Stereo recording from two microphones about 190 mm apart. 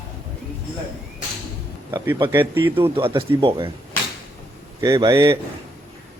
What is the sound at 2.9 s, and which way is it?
Speech, 30° right (ahead or behind).